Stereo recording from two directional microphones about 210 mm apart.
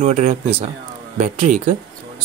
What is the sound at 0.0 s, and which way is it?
Speech, 30° right (ahead or behind).